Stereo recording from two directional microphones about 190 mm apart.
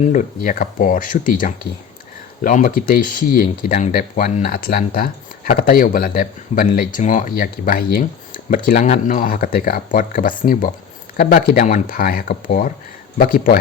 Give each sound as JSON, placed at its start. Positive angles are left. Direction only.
{"t": 0.0, "sound": "speech", "side_deg": 40}